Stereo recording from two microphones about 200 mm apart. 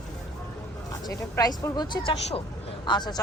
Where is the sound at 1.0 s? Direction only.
20° left (ahead or behind).